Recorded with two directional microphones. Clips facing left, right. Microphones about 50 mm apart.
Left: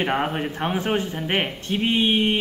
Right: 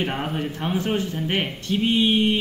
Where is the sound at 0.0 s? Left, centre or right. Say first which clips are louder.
Left 3 dB; left.